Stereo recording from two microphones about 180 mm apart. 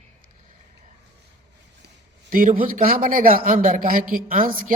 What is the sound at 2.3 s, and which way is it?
A man's voice, 50° right (ahead or behind).